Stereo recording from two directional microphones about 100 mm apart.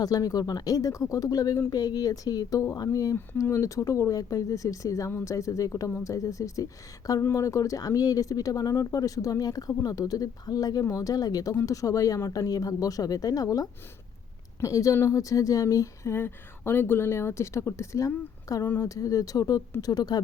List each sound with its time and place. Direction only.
0.0 s speech: 35° left (ahead or behind)